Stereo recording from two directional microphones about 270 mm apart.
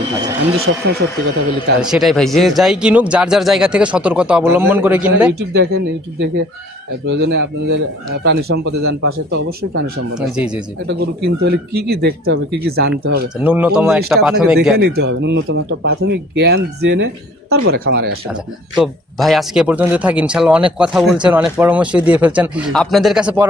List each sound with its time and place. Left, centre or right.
0.7 s speech: right
1.8 s speech: centre
5.3 s speech: right
10.2 s speech: centre
10.8 s speech: right
13.4 s speech: centre
14.8 s speech: right
18.8 s speech: centre